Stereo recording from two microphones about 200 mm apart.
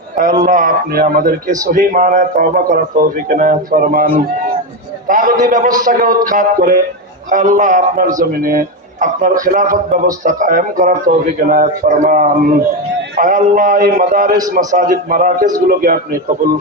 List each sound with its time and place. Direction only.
0.4 s a man's voice: 45° right (ahead or behind)